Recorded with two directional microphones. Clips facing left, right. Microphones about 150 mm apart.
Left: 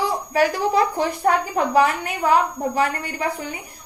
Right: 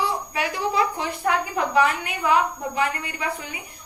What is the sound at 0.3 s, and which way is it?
A woman's voice, 40° left (ahead or behind).